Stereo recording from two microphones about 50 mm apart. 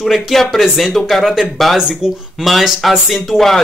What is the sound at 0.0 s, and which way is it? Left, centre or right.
Speech, centre.